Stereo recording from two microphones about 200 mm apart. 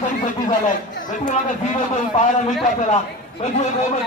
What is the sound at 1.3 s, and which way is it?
A man's voice, 35° left (ahead or behind).